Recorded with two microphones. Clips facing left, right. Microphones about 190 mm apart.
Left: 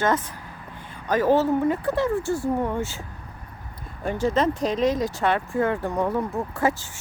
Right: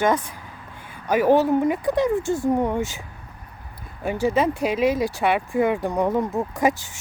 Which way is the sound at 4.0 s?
10° right (ahead or behind).